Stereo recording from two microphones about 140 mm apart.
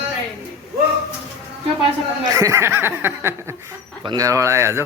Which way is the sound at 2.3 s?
25° right (ahead or behind).